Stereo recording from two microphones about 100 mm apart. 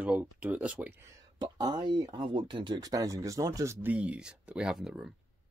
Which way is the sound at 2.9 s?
35° right (ahead or behind).